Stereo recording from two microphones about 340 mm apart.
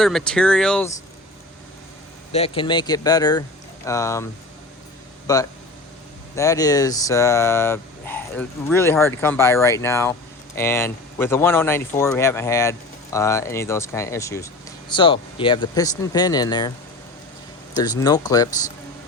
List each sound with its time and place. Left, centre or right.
0.0 s speech: centre
2.3 s speech: centre
5.3 s speech: centre
17.7 s speech: centre